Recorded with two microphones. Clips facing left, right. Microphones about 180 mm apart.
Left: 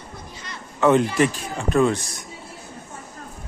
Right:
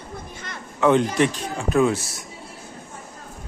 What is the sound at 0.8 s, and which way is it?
Speech, centre (ahead or behind).